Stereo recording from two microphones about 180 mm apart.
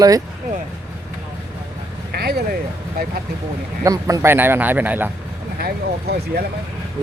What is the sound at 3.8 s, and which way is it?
Speech, 20° right (ahead or behind).